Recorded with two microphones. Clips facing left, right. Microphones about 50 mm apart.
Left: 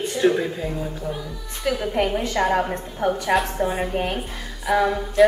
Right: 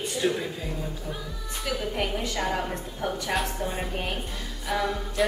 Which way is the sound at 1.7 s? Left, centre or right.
Centre.